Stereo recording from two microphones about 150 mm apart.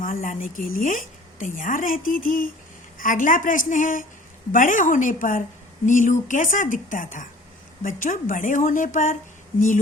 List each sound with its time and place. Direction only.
0.0 s a woman's voice: 65° left (ahead or behind)